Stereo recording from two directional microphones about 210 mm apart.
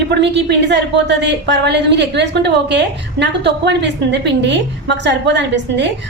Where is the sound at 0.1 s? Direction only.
55° right (ahead or behind).